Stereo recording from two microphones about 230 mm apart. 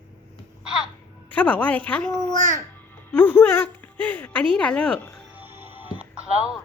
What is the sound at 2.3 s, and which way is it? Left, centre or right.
Speech, right.